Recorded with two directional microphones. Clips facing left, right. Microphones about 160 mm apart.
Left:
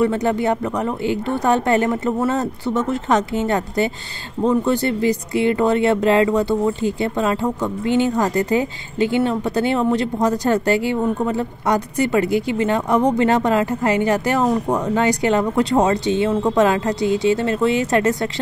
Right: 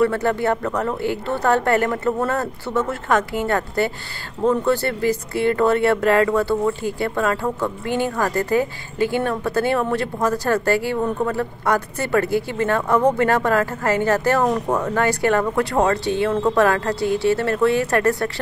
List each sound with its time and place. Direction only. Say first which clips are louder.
0.0 s speech: left 1 dB; 15° left (ahead or behind)